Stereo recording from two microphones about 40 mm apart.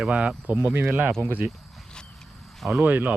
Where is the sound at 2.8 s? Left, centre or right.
Right.